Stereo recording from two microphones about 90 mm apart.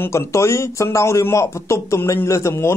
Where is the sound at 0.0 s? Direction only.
35° left (ahead or behind).